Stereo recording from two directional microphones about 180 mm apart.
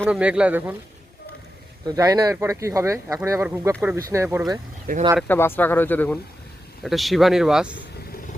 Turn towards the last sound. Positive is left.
turn(degrees=-5)  # may be behind; listen again after turning